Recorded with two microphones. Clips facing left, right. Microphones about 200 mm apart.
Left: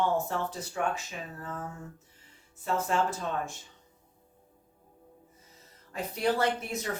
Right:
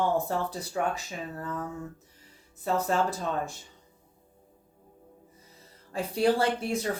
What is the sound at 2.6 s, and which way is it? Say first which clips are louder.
Speech: right 2 dB; 35° right (ahead or behind).